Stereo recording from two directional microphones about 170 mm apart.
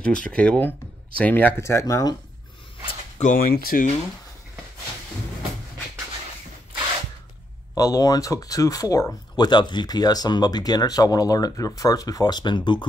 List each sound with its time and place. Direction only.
0.0 s speech: 5° left (ahead or behind)
3.2 s speech: 50° left (ahead or behind)
7.7 s speech: 20° left (ahead or behind)